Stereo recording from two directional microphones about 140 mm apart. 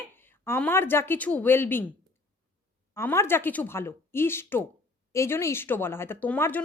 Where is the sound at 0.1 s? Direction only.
15° left (ahead or behind).